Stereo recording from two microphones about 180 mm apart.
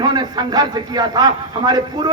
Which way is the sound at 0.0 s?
25° right (ahead or behind).